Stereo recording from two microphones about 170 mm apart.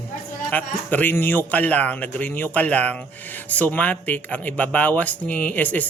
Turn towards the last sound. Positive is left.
turn(degrees=10)  # may be behind; listen again after turning